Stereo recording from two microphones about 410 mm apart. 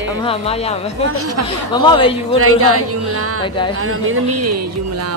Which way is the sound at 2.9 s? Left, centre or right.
Right.